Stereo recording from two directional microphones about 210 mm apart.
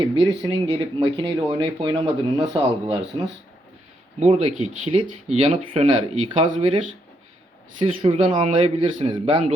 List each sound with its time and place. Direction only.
0.4 s speech: 25° right (ahead or behind)
4.2 s speech: 30° right (ahead or behind)